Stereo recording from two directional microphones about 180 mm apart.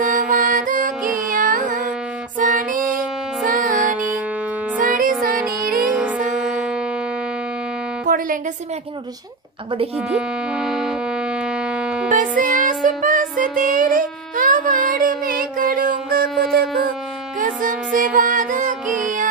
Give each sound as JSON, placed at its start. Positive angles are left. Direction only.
{"t": 0.0, "sound": "music", "side_deg": -45}
{"t": 3.9, "sound": "music", "side_deg": -10}
{"t": 4.7, "sound": "music", "side_deg": -50}
{"t": 6.4, "sound": "music", "side_deg": -5}
{"t": 8.0, "sound": "music", "side_deg": -50}
{"t": 9.9, "sound": "music", "side_deg": 0}
{"t": 12.1, "sound": "music", "side_deg": -50}